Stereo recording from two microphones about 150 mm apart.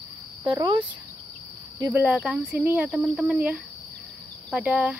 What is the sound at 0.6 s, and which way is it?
Speech, 30° right (ahead or behind).